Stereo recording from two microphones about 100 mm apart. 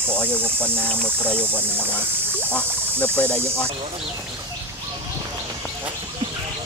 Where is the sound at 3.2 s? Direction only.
15° left (ahead or behind).